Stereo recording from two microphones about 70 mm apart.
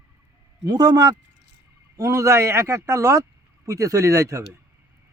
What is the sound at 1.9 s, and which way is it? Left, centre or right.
Speech, right.